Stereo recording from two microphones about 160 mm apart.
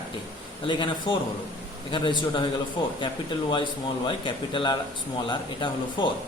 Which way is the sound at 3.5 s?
30° left (ahead or behind).